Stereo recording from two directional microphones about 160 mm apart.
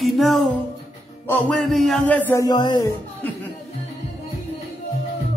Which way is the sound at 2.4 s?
30° left (ahead or behind).